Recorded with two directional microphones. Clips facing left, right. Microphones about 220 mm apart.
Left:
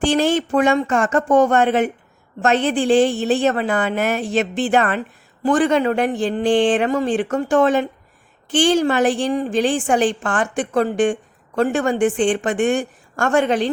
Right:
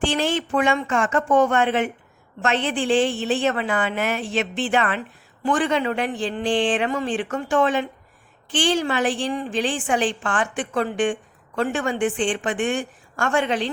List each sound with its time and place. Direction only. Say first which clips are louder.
0.0 s a woman's voice: left 5 dB; 40° left (ahead or behind)